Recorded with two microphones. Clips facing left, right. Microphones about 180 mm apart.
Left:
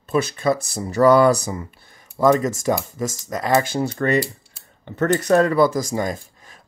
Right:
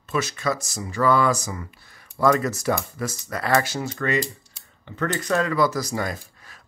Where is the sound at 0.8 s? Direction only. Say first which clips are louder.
Left 6 dB; 40° left (ahead or behind); by 3.6 s 20° left (ahead or behind).